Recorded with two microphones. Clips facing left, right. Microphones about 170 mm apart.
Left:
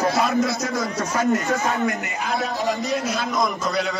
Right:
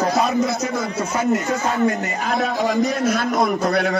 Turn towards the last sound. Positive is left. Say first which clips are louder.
# right 5 dB
turn(degrees=-60)  # may be behind; listen again after turning